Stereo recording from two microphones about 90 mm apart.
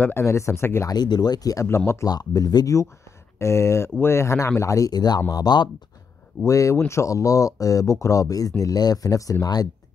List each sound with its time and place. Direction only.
0.0 s speech: 30° left (ahead or behind)
0.8 s speech: 50° left (ahead or behind)
6.4 s speech: 35° left (ahead or behind)